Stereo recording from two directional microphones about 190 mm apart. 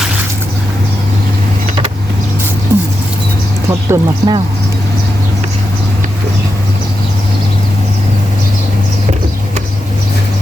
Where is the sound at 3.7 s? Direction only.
15° right (ahead or behind).